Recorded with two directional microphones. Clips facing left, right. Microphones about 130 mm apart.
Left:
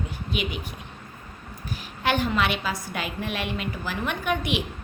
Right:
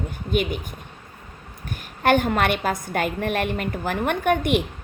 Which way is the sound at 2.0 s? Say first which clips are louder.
Right 5 dB; 50° right (ahead or behind).